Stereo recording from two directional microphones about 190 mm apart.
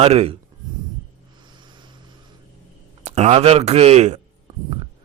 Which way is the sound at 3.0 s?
35° right (ahead or behind).